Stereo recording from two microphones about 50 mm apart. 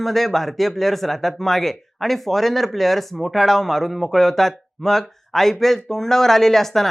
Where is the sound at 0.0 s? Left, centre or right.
Centre.